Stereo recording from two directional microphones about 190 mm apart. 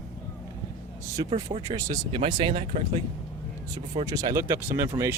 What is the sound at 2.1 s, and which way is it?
Speech, 30° right (ahead or behind).